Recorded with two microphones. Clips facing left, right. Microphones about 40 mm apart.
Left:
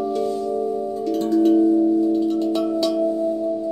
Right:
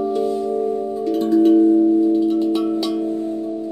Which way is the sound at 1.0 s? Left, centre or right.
Centre.